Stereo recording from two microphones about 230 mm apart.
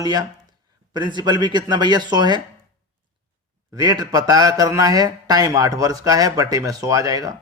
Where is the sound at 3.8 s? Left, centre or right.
Centre.